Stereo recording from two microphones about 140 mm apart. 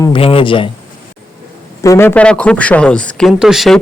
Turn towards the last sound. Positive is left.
turn(degrees=0)  # may be behind; listen again after turning